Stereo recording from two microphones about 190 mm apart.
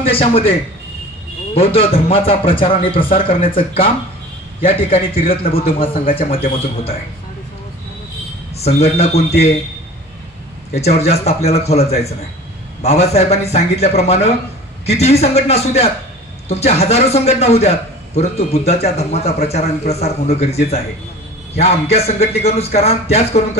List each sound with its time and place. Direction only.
0.0 s a man's voice: 30° left (ahead or behind)
8.5 s a man's voice: 35° left (ahead or behind)
10.7 s a man's voice: 35° left (ahead or behind)